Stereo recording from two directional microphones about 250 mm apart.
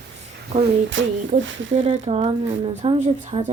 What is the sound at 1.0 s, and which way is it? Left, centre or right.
Speech, right.